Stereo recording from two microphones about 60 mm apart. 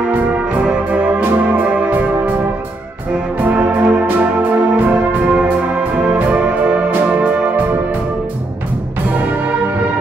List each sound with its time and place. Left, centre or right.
0.7 s music: right
3.5 s music: right